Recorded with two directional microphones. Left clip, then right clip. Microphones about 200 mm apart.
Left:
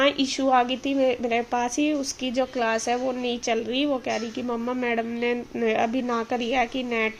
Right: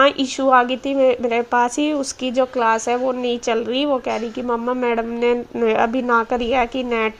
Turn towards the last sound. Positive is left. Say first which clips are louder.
# right 5 dB
turn(degrees=-15)  # may be behind; listen again after turning